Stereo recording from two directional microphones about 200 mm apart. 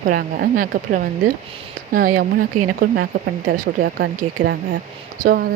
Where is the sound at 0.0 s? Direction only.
40° right (ahead or behind).